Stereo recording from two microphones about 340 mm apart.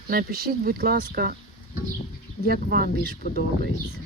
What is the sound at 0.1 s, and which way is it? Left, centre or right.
Speech, right.